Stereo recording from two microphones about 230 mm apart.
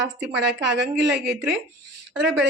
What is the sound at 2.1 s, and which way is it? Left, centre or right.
Speech, centre.